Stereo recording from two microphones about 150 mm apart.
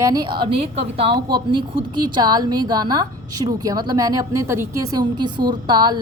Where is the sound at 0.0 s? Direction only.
25° right (ahead or behind).